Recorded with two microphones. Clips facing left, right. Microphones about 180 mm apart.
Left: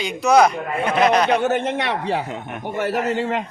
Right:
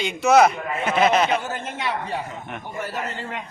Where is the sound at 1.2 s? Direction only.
65° left (ahead or behind); by 3.4 s 90° left.